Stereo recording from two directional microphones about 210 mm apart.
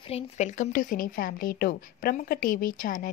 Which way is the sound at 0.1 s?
35° left (ahead or behind).